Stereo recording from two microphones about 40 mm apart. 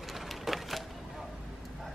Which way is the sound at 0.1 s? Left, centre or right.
Centre.